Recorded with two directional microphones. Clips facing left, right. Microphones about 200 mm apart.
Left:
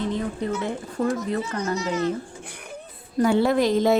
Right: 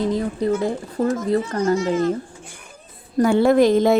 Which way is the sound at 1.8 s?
50° right (ahead or behind).